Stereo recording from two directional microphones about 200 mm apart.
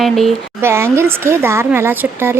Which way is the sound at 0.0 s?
Centre (ahead or behind).